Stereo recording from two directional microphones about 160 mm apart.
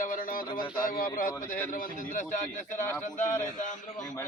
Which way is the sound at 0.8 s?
60° left (ahead or behind).